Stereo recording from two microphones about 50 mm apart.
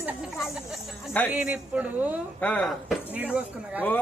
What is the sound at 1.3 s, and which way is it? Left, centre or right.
Speech, right.